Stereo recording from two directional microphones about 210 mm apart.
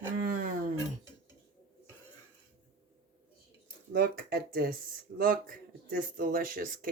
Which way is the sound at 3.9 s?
45° right (ahead or behind).